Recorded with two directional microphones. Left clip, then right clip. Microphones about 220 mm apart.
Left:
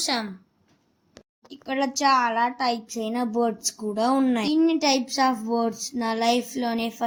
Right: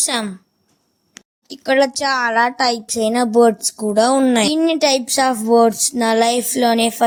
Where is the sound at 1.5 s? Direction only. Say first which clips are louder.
Right 12 dB; 50° right (ahead or behind).